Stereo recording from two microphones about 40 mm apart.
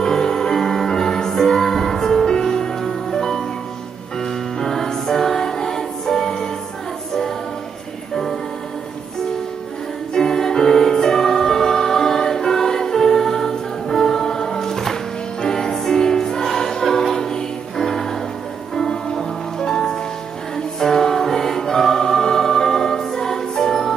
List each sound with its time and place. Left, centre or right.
0.0 s music: centre
10.1 s music: centre
20.5 s choir: centre